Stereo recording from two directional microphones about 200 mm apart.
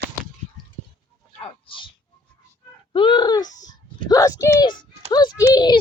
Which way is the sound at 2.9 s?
25° left (ahead or behind).